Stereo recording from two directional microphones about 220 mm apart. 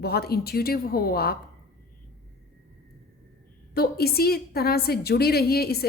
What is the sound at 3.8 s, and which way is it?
A woman's voice, 45° left (ahead or behind).